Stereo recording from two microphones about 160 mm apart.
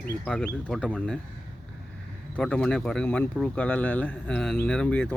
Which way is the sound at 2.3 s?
5° left (ahead or behind).